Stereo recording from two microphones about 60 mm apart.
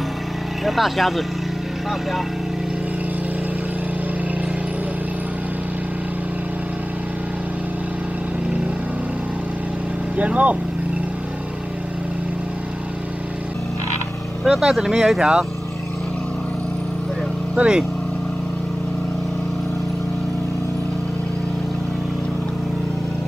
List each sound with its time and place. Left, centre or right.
0.7 s speech: centre
10.1 s speech: right
14.4 s speech: centre
17.6 s speech: centre